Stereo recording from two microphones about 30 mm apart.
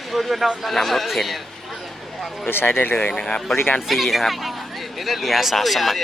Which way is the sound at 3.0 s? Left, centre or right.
Left.